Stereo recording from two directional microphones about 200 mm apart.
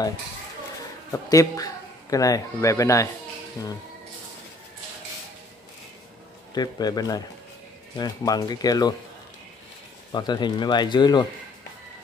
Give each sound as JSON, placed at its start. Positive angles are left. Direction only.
{"t": 1.1, "sound": "a man's voice", "side_deg": 15}
{"t": 6.5, "sound": "speech", "side_deg": 20}
{"t": 10.1, "sound": "speech", "side_deg": 20}